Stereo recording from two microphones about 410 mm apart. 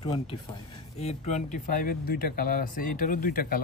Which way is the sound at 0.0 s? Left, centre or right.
Centre.